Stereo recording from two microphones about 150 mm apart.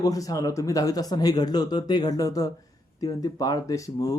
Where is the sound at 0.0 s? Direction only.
25° left (ahead or behind).